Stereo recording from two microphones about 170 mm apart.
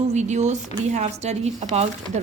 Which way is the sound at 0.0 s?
40° right (ahead or behind).